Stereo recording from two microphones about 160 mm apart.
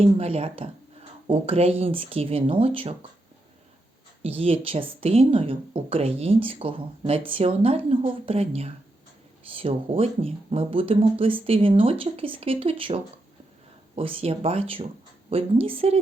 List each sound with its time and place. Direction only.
0.0 s speech: 40° right (ahead or behind)
4.2 s speech: 35° right (ahead or behind)